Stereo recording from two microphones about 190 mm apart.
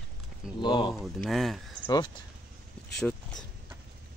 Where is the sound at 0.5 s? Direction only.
25° left (ahead or behind).